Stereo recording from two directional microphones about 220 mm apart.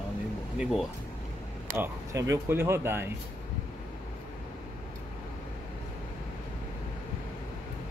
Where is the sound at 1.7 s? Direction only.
10° right (ahead or behind).